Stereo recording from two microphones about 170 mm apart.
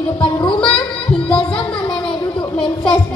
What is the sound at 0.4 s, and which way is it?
Music, 30° left (ahead or behind).